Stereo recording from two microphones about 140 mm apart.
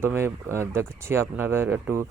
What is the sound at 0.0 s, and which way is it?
Speech, 15° right (ahead or behind).